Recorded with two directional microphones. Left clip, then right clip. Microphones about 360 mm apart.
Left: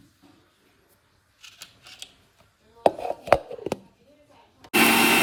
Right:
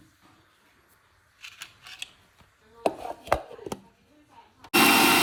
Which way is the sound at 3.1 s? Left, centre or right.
Centre.